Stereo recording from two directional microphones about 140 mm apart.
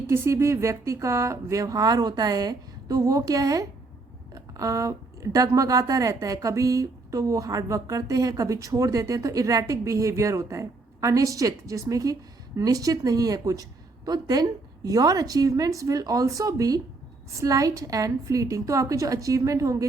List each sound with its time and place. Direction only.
0.1 s a woman's voice: 20° right (ahead or behind)